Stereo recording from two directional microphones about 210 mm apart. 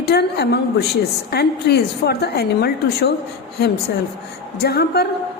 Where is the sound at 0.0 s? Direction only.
50° left (ahead or behind).